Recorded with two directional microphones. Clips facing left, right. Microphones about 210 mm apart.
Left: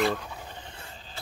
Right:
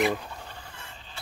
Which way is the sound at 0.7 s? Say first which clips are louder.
Left 1 dB; 35° left (ahead or behind).